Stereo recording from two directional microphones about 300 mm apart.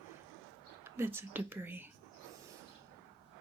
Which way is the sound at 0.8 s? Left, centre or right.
Centre.